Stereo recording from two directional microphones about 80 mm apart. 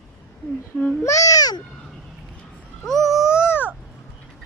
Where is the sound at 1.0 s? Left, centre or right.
Left.